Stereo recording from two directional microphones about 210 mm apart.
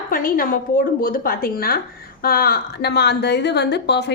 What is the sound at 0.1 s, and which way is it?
A woman's voice, 45° left (ahead or behind).